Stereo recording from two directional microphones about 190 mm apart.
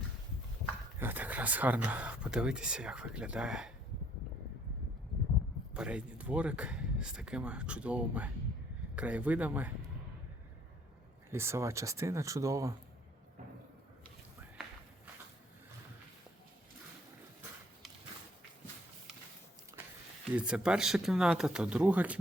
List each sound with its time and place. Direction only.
0.9 s speech: 10° right (ahead or behind)
5.7 s speech: 5° right (ahead or behind)
11.3 s speech: 15° right (ahead or behind)
20.3 s speech: 5° right (ahead or behind)